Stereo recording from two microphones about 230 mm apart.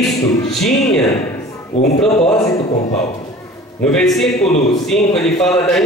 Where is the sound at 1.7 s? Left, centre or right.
Left.